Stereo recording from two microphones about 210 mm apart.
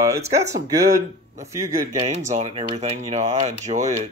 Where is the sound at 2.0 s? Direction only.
30° right (ahead or behind).